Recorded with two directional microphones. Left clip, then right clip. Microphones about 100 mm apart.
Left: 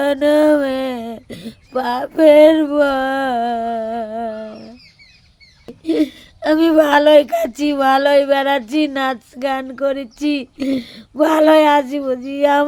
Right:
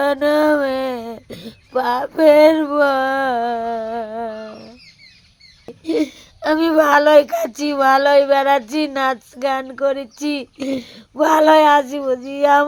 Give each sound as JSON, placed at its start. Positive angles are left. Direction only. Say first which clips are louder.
{"t": 0.0, "sound": "speech", "louder": "left 2 dB", "side_deg": 45}
{"t": 5.8, "sound": "speech", "louder": "left 2 dB", "side_deg": 40}